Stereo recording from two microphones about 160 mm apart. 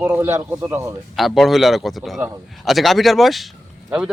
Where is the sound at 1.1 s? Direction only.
Centre (ahead or behind).